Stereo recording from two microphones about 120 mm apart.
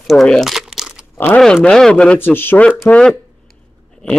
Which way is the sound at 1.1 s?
15° left (ahead or behind).